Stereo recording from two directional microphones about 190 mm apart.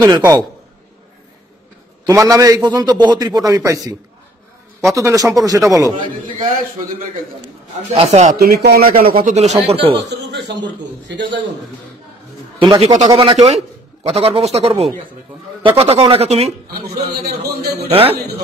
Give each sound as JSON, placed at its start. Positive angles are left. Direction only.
{"t": 0.0, "sound": "a man's voice", "side_deg": -15}
{"t": 2.0, "sound": "a man's voice", "side_deg": -15}
{"t": 7.4, "sound": "speech", "side_deg": -30}
{"t": 8.4, "sound": "speech", "side_deg": -55}
{"t": 9.2, "sound": "speech", "side_deg": -35}
{"t": 10.0, "sound": "a man's voice", "side_deg": -65}
{"t": 12.5, "sound": "speech", "side_deg": -25}
{"t": 17.1, "sound": "a man's voice", "side_deg": -55}